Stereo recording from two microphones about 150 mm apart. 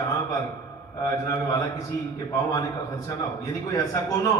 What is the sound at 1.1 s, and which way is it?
Speech, 20° left (ahead or behind).